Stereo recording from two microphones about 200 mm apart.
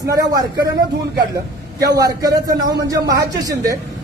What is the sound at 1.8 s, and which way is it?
A man's voice, 20° right (ahead or behind).